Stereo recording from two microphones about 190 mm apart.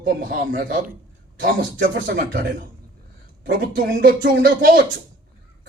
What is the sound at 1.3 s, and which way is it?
Speech, 75° right (ahead or behind).